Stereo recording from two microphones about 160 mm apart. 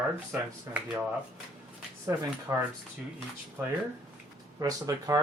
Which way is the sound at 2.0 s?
20° right (ahead or behind).